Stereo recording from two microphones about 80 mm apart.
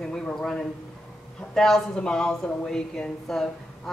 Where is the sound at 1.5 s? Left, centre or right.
Centre.